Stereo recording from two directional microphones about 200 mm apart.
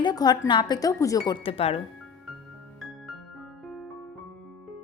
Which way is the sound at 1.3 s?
30° left (ahead or behind).